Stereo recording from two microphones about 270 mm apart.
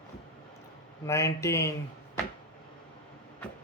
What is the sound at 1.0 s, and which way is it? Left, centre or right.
Speech, centre.